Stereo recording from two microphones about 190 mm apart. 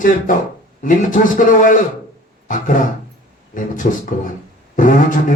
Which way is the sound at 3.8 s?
40° left (ahead or behind).